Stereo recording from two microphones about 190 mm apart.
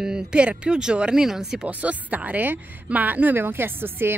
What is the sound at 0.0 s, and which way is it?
A woman's voice, 5° right (ahead or behind).